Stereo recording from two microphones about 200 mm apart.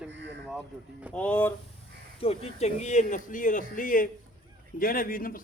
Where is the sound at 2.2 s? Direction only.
30° left (ahead or behind).